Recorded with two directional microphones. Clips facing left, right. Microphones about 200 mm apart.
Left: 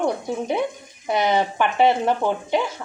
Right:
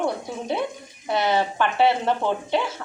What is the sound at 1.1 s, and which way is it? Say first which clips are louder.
Speech: left 2 dB; 15° left (ahead or behind).